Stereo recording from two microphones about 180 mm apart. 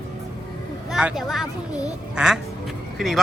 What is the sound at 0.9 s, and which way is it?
Speech, centre (ahead or behind).